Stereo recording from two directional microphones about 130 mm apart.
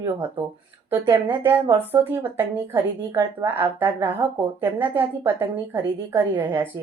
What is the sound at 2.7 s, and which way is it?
Speech, 30° right (ahead or behind).